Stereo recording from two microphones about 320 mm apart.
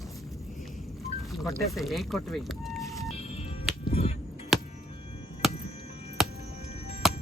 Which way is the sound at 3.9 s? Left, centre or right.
Centre.